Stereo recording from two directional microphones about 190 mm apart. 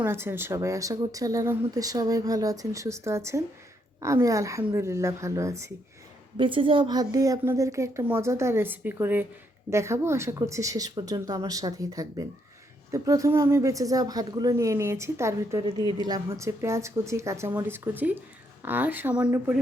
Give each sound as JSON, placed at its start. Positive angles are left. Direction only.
{"t": 0.0, "sound": "speech", "side_deg": -10}
{"t": 6.3, "sound": "speech", "side_deg": -25}